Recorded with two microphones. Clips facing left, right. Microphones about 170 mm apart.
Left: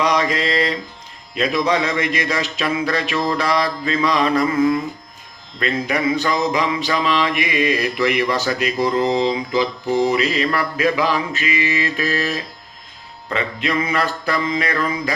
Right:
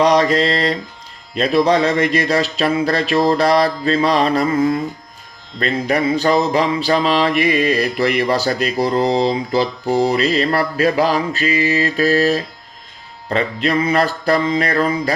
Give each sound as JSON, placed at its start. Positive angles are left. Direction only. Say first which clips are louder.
{"t": 0.0, "sound": "mantra", "louder": "right 5 dB", "side_deg": -35}